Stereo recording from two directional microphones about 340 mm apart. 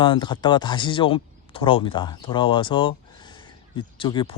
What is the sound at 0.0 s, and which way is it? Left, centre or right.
Speech, centre.